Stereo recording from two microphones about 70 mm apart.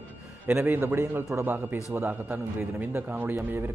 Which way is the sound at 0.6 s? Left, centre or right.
Right.